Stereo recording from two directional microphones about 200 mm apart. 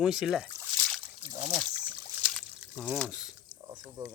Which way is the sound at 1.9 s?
5° right (ahead or behind).